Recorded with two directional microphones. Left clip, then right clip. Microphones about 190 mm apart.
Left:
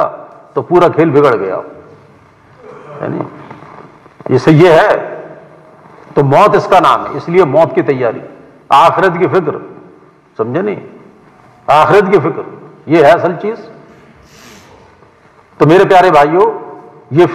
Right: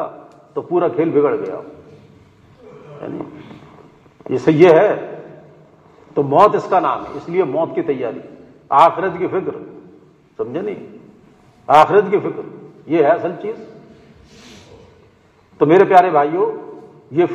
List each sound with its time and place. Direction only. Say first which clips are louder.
0.6 s a man's voice: left 9 dB; 25° left (ahead or behind)
2.9 s a sound: left 9 dB; 25° left (ahead or behind)
5.9 s a man's voice: left 4 dB; 25° left (ahead or behind)
15.5 s a man's voice: left 4 dB; 30° left (ahead or behind)